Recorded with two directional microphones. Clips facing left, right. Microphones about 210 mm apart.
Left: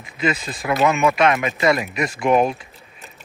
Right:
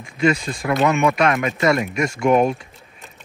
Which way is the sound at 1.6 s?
45° right (ahead or behind).